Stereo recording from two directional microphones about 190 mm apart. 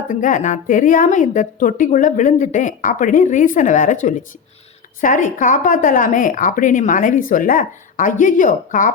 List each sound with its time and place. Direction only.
0.1 s a woman's voice: 45° left (ahead or behind)